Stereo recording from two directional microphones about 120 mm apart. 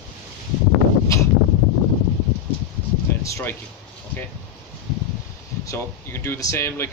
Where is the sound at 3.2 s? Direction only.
20° left (ahead or behind).